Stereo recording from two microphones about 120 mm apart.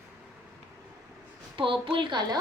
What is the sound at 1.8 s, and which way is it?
Speech, 45° right (ahead or behind).